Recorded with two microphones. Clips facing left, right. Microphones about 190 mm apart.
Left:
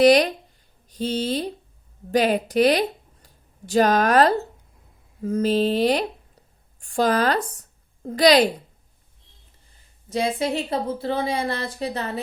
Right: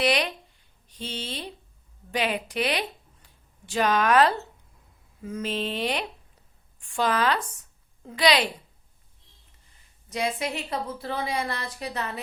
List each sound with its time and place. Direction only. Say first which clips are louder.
0.0 s a woman's voice: left 10 dB; 40° left (ahead or behind)
10.1 s a woman's voice: left 5 dB; 30° left (ahead or behind)